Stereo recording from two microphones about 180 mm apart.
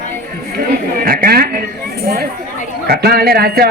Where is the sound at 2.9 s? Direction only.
60° right (ahead or behind).